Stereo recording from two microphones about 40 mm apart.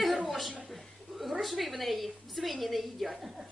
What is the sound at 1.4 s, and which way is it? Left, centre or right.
A woman's voice, centre.